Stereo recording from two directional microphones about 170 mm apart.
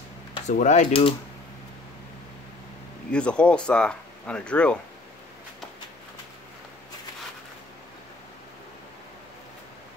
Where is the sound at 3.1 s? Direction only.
5° left (ahead or behind).